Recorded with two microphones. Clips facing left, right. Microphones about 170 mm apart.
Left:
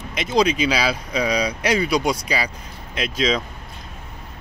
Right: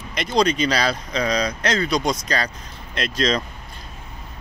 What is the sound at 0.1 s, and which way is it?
Speech, 5° left (ahead or behind).